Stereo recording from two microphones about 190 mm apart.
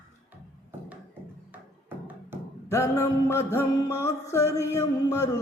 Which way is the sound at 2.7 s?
15° left (ahead or behind).